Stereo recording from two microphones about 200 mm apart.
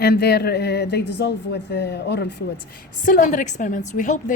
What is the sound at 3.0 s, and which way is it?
Speech, 40° left (ahead or behind).